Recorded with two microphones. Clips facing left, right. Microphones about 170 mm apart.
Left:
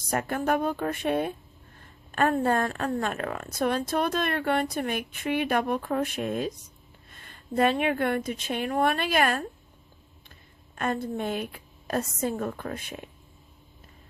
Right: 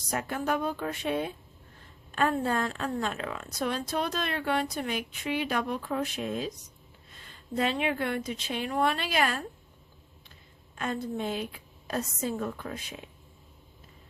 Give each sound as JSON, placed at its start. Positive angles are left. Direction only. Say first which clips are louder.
{"t": 0.1, "sound": "a woman's voice", "louder": "left 4 dB", "side_deg": 50}
{"t": 10.8, "sound": "a woman's voice", "louder": "left 3 dB", "side_deg": 55}